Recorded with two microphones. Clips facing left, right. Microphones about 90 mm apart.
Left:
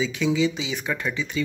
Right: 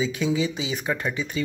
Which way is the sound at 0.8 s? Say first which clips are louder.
Right 1 dB; 30° right (ahead or behind).